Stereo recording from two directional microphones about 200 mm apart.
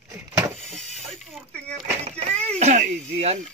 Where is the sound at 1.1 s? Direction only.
Centre (ahead or behind).